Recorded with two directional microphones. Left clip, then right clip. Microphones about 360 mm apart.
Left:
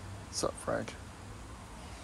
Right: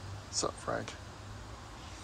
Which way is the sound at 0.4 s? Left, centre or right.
Centre.